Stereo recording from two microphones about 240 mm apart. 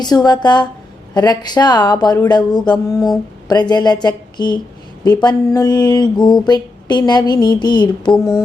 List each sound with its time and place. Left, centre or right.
0.3 s speech: centre